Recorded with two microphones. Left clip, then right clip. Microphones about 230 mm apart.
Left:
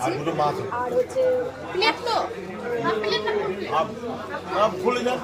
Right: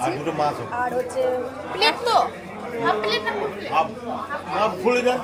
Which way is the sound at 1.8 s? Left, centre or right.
Right.